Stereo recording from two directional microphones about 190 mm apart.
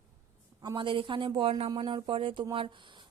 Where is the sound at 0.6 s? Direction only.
25° right (ahead or behind).